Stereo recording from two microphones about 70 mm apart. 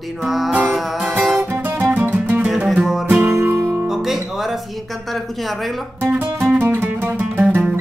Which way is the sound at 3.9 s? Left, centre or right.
Centre.